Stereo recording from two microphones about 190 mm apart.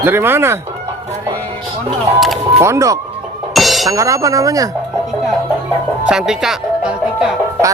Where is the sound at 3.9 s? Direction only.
15° right (ahead or behind).